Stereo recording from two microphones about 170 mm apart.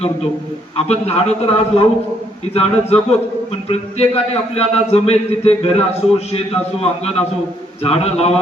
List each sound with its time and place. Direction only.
0.9 s a man's voice: 40° left (ahead or behind)
7.9 s a man's voice: 35° left (ahead or behind)